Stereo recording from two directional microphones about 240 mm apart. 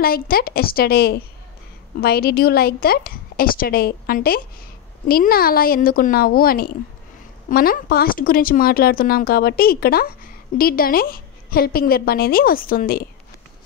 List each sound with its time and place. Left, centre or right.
0.0 s speech: left